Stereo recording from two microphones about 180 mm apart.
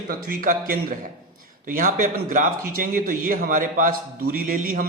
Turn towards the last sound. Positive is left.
turn(degrees=-50)  # may be behind; listen again after turning